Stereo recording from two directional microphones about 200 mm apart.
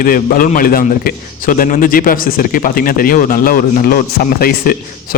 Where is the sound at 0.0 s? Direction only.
45° left (ahead or behind).